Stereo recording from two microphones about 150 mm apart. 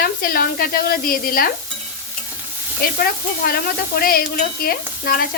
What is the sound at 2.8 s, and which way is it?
Sizzle, 80° left.